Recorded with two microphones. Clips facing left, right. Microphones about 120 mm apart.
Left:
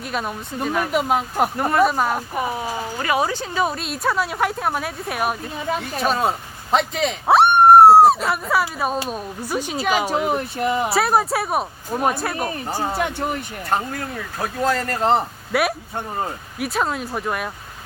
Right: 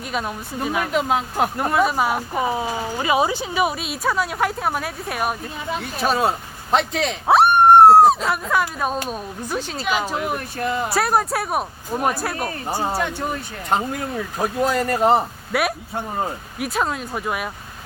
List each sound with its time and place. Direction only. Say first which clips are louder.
0.0 s speech: even; centre (ahead or behind)
0.9 s speech: left 1 dB; 10° left (ahead or behind)
2.3 s speech: right 2 dB; 20° right (ahead or behind); by 9.8 s 10° left (ahead or behind)
10.2 s speech: left 3 dB; 25° left (ahead or behind)
10.8 s speech: right 1 dB; centre (ahead or behind)
12.6 s speech: right 1 dB; 15° right (ahead or behind)
14.6 s speech: right 2 dB; 15° right (ahead or behind)
15.5 s speech: left 1 dB; centre (ahead or behind)